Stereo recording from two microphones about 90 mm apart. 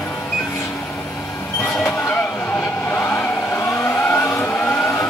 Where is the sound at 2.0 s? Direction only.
20° left (ahead or behind).